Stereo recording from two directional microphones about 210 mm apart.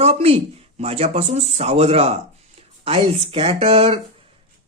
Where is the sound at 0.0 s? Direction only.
30° right (ahead or behind).